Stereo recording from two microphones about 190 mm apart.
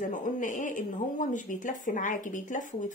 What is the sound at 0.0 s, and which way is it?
Speech, 45° left (ahead or behind).